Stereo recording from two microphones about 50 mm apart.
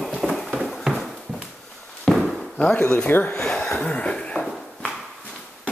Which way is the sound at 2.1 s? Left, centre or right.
Centre.